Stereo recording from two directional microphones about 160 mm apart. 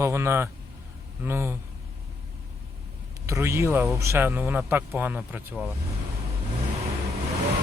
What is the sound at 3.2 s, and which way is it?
Speech, 20° right (ahead or behind).